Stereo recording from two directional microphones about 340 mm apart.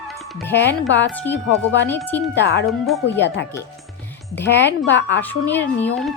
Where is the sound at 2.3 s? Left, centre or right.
Left.